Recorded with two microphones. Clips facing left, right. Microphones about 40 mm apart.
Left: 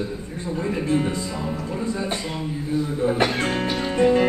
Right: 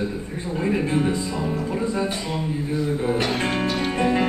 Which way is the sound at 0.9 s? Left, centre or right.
Centre.